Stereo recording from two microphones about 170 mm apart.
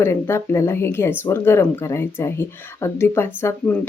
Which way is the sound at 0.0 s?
15° left (ahead or behind).